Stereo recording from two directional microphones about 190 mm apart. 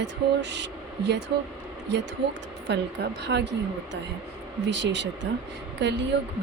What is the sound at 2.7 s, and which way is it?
Speech, 65° right (ahead or behind).